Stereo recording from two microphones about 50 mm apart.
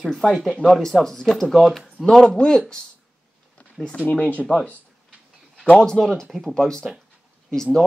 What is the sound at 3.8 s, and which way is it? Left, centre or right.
Speech, left.